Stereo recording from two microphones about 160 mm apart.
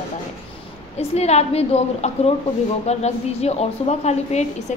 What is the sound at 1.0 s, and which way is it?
A woman's voice, 40° left (ahead or behind).